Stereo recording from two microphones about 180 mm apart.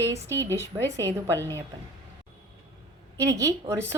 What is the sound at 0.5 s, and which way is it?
Speech, 15° right (ahead or behind).